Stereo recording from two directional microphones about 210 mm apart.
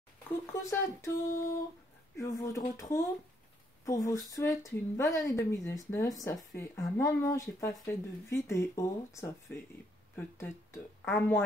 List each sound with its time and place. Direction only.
0.5 s a woman's voice: 15° left (ahead or behind)